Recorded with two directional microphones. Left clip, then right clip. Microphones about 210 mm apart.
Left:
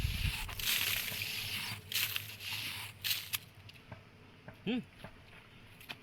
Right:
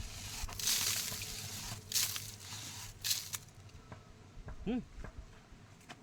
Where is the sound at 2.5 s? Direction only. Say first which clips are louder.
Left 11 dB; 5° right (ahead or behind).